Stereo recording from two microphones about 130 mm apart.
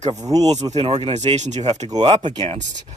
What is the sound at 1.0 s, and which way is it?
Speech, 55° right (ahead or behind).